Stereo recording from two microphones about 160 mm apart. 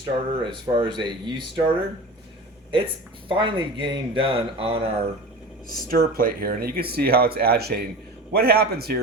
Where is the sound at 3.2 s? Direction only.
30° right (ahead or behind).